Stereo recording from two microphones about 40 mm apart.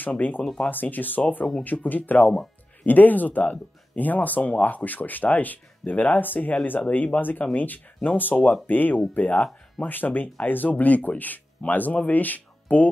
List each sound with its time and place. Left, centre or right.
0.7 s speech: left
9.8 s speech: left